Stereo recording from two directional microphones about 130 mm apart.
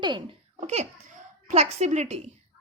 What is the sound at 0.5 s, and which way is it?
A child's voice, 60° right (ahead or behind).